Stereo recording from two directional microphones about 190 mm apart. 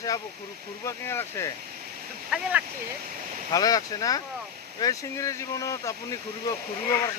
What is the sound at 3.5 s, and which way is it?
Speech, 20° left (ahead or behind).